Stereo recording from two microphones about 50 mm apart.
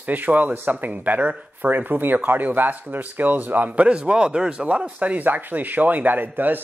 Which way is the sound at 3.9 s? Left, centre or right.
Right.